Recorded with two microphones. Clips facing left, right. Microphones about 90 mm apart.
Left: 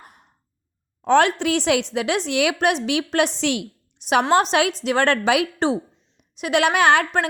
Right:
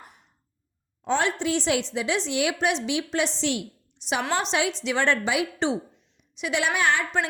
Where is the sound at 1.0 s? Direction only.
65° left (ahead or behind).